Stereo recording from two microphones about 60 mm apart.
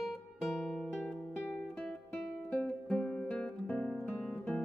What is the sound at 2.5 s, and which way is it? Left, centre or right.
Music, left.